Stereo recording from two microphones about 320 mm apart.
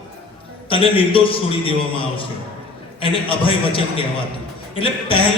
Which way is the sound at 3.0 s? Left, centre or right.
Centre.